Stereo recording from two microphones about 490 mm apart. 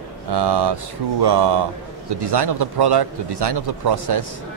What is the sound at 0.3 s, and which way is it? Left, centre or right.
Speech, right.